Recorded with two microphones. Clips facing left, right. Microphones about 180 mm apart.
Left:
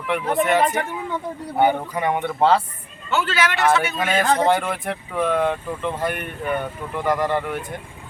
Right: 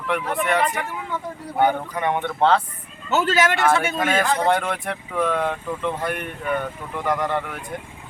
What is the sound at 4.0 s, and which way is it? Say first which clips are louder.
Speech: left 1 dB; centre (ahead or behind).